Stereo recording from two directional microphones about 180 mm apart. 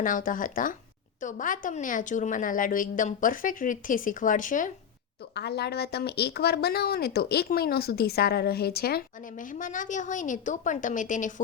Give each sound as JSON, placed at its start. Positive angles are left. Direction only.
{"t": 0.0, "sound": "a woman's voice", "side_deg": 50}
{"t": 5.3, "sound": "speech", "side_deg": 65}